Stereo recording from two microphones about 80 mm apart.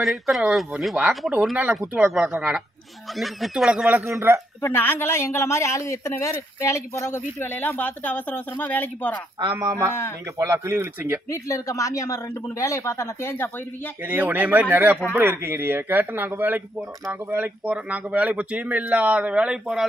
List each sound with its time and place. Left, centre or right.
0.0 s speech: centre
4.1 s speech: right
4.6 s a man's voice: left
9.6 s a man's voice: right
11.2 s speech: left
14.0 s speech: right